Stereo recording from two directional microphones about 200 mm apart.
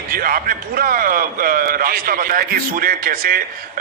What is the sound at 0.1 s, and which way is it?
A man's voice, 45° right (ahead or behind).